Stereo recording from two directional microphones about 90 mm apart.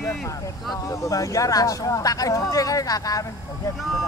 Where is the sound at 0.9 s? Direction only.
35° left (ahead or behind).